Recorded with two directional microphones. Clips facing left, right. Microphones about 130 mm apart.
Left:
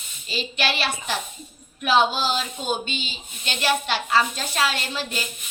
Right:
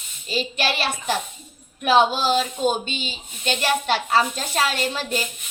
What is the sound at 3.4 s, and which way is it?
A woman's voice, 45° right (ahead or behind).